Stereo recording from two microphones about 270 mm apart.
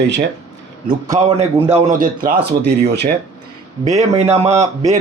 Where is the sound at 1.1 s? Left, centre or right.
Right.